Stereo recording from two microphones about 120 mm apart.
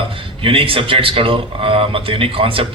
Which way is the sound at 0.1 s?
50° right (ahead or behind).